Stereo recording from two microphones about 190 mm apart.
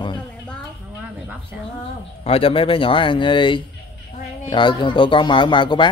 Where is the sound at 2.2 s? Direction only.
30° left (ahead or behind).